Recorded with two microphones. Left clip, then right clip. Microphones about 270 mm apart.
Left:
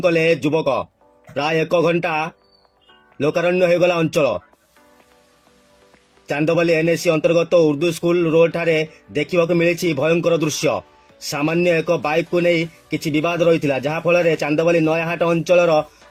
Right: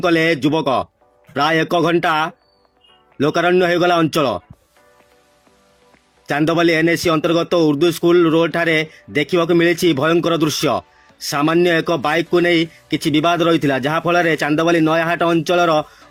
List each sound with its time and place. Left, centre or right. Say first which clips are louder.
0.0 s speech: right 1 dB; right
6.3 s speech: right 2 dB; right